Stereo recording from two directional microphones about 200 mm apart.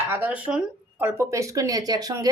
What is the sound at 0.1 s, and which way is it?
Speech, 5° right (ahead or behind).